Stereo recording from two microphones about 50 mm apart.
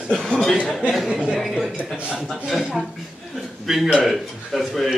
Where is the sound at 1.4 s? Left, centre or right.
Centre.